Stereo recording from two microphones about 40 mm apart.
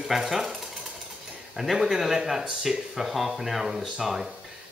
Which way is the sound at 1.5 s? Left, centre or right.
Centre.